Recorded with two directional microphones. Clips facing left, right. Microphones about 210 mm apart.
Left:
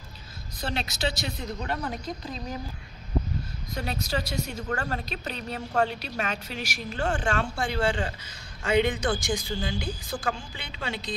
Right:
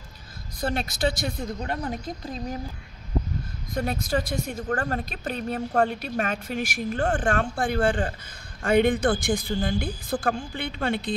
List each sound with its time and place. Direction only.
0.6 s a woman's voice: 50° right (ahead or behind)
3.7 s a woman's voice: 50° right (ahead or behind)